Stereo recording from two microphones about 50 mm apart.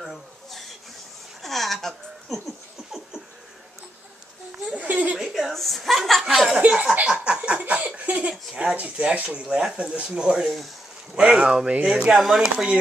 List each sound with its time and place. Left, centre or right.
0.0 s a sound: centre
1.4 s laughter: centre
5.1 s a sound: centre
5.5 s chuckle: centre
6.6 s laughter: right
8.5 s speech: right
9.4 s speech: centre
9.8 s speech: right
12.1 s speech: centre
12.4 s speech: centre